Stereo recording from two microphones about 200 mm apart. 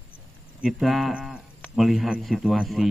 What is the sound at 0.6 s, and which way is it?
Speech, centre (ahead or behind).